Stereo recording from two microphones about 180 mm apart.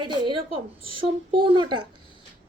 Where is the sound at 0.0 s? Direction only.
25° right (ahead or behind).